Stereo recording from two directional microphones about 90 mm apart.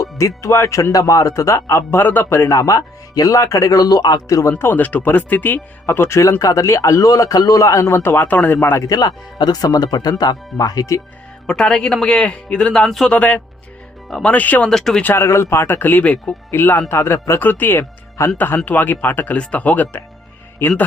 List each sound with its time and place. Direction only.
0.0 s speech: 35° left (ahead or behind)
2.0 s speech: 20° left (ahead or behind); by 4.5 s 40° left (ahead or behind)
4.5 s speech: 20° left (ahead or behind)
8.9 s speech: 45° left (ahead or behind)
11.4 s a man's voice: 10° left (ahead or behind)
13.1 s a man's voice: 15° left (ahead or behind)
14.7 s speech: 5° left (ahead or behind)
15.0 s speech: 30° left (ahead or behind)